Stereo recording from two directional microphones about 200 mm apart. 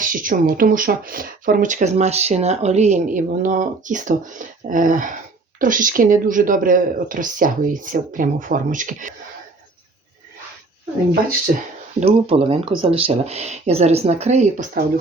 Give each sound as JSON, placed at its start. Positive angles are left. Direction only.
{"t": 0.0, "sound": "speech", "side_deg": -40}
{"t": 11.9, "sound": "speech", "side_deg": -30}